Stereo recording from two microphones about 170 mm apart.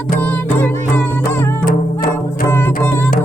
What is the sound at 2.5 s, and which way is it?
Music, 15° left (ahead or behind).